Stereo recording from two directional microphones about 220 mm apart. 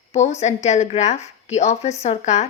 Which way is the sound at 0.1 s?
30° left (ahead or behind).